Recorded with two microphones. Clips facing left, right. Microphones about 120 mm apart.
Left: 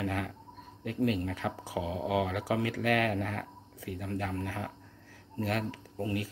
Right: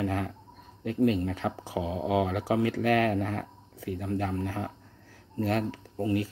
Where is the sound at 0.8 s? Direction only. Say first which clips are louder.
Right 5 dB; 30° right (ahead or behind).